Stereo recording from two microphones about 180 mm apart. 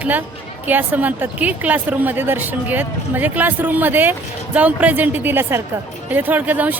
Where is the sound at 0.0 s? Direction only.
10° right (ahead or behind).